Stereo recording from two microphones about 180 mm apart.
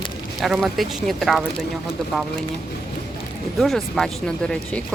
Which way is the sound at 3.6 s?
Centre (ahead or behind).